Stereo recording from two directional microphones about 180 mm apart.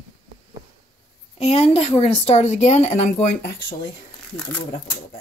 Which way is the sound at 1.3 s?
35° left (ahead or behind).